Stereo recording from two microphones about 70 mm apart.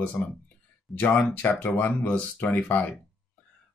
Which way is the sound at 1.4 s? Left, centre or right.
Left.